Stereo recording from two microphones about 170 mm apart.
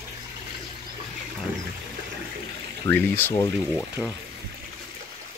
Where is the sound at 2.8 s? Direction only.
10° left (ahead or behind).